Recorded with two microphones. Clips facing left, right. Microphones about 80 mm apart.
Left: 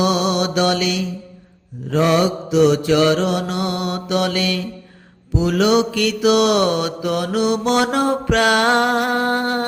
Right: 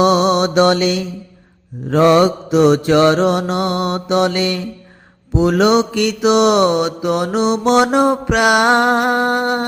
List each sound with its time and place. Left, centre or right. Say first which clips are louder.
0.0 s mantra: right 5 dB; right
1.9 s mantra: right 5 dB; right
5.3 s mantra: right 3 dB; right
5.9 s mantra: right 2 dB; right